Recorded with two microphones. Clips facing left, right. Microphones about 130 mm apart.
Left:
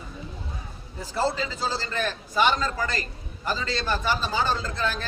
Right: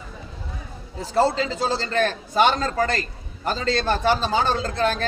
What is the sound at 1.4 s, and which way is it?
A man's voice, 65° right (ahead or behind).